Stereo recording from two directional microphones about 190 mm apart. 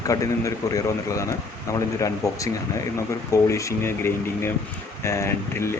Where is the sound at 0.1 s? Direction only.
15° left (ahead or behind).